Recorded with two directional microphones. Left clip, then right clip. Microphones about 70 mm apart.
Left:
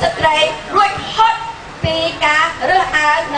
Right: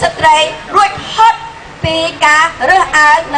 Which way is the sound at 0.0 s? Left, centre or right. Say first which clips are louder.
Right 4 dB; right.